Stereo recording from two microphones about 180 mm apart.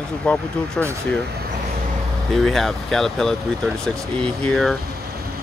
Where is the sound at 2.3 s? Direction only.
Centre (ahead or behind).